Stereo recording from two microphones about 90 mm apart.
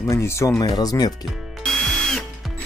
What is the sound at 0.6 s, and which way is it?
Speech, 45° left (ahead or behind).